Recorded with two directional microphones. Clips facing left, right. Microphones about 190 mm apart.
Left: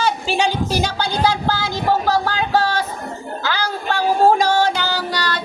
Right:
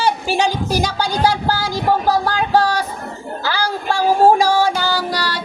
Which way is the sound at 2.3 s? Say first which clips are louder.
Right 3 dB; 35° right (ahead or behind).